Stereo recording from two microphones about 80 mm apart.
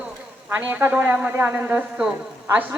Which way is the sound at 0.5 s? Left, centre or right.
Right.